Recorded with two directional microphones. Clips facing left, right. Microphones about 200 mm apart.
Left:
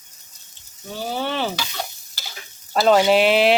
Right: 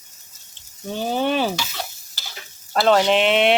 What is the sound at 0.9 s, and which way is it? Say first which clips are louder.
Speech: right 4 dB; 15° right (ahead or behind).